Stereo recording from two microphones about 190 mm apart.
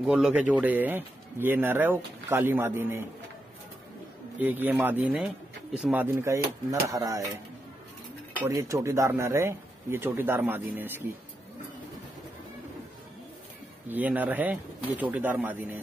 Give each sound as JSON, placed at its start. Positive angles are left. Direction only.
{"t": 0.0, "sound": "speech", "side_deg": -5}
{"t": 4.4, "sound": "speech", "side_deg": -10}
{"t": 8.5, "sound": "speech", "side_deg": -15}
{"t": 13.8, "sound": "speech", "side_deg": -10}